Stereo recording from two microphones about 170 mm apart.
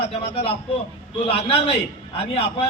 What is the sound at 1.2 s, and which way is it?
Speech, 35° left (ahead or behind).